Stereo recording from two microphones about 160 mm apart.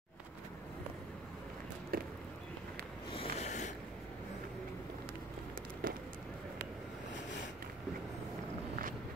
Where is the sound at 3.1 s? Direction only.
40° left (ahead or behind).